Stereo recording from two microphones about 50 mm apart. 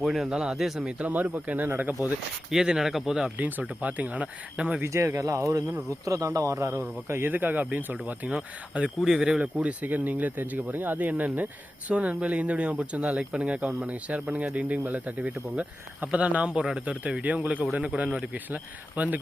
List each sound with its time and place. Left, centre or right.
0.0 s speech: centre
0.3 s speech: centre
0.9 s speech: right
1.6 s speech: right
2.5 s speech: centre
3.3 s speech: right
4.5 s speech: right
4.9 s a man's voice: right
7.3 s speech: right
8.3 s speech: centre
9.6 s speech: right